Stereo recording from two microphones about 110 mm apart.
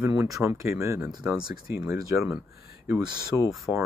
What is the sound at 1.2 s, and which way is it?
Speech, 10° right (ahead or behind).